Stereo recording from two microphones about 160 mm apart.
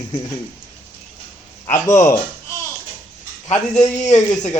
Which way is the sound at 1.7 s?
15° left (ahead or behind).